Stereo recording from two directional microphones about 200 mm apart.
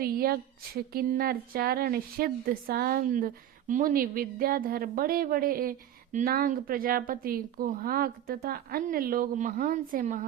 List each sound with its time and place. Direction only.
0.0 s a woman's voice: 50° right (ahead or behind)